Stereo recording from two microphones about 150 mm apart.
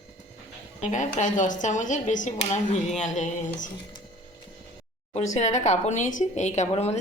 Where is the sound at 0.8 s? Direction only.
55° left (ahead or behind).